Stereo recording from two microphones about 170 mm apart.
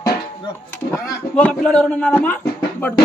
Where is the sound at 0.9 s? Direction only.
10° left (ahead or behind).